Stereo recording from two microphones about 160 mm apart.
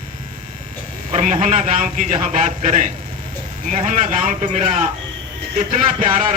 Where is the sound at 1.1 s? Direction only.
45° right (ahead or behind).